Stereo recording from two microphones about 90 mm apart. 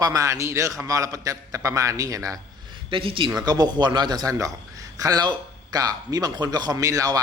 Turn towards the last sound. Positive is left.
turn(degrees=-40)  # may be behind; listen again after turning